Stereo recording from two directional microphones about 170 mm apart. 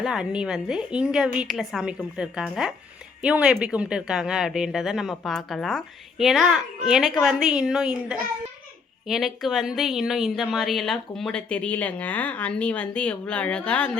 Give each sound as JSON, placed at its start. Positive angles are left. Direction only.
{"t": 0.0, "sound": "speech", "side_deg": -5}